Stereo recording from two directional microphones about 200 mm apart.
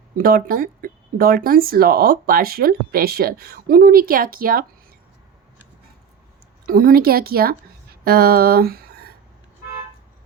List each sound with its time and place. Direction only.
0.2 s speech: 50° right (ahead or behind)
6.7 s speech: 45° right (ahead or behind)